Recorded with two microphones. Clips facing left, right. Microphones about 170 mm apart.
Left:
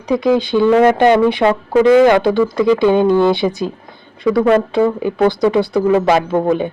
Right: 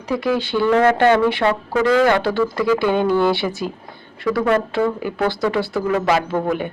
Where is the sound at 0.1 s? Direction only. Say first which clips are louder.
Left 6 dB; 20° left (ahead or behind).